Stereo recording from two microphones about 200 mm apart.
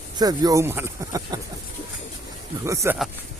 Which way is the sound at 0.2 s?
20° right (ahead or behind).